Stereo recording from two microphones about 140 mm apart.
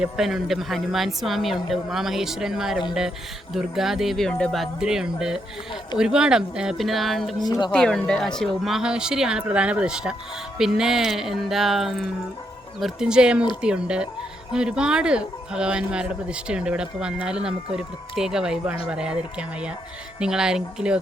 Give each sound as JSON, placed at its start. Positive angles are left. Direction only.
{"t": 0.0, "sound": "speech", "side_deg": 0}
{"t": 7.3, "sound": "speech", "side_deg": 30}
{"t": 7.7, "sound": "speech", "side_deg": 5}